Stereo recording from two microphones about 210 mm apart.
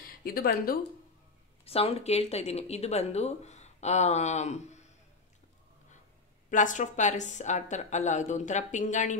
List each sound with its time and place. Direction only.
0.0 s speech: 45° left (ahead or behind)
1.6 s speech: 30° left (ahead or behind)
6.5 s speech: 35° left (ahead or behind)